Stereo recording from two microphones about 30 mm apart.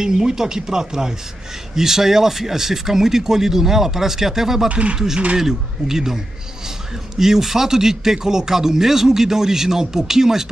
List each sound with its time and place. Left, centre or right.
0.0 s speech: right
4.6 s speech: right
4.9 s speech: right